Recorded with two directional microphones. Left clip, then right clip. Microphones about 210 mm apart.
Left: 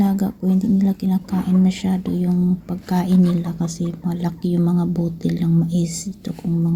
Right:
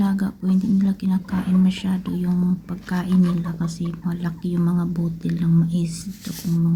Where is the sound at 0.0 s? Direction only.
10° left (ahead or behind).